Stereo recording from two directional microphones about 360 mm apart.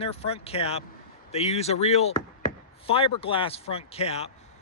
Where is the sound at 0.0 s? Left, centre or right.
Centre.